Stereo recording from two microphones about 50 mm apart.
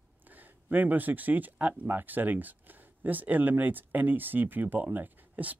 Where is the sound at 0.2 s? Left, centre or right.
Right.